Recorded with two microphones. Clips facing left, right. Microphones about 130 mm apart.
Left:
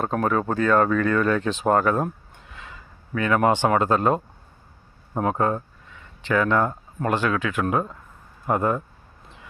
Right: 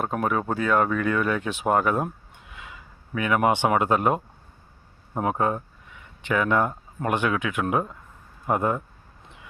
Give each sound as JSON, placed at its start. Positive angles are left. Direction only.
{"t": 0.0, "sound": "speech", "side_deg": -10}